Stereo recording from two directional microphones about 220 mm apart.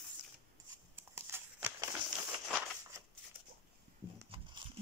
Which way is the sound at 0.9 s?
10° right (ahead or behind).